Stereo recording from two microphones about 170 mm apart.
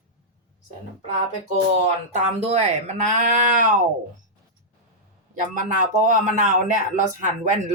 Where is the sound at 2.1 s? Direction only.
40° right (ahead or behind).